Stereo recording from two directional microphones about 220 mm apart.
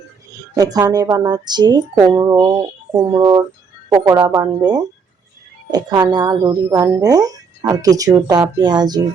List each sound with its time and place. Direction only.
0.3 s speech: 15° right (ahead or behind)